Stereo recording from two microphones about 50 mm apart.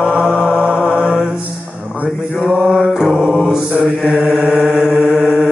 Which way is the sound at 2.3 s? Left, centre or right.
Centre.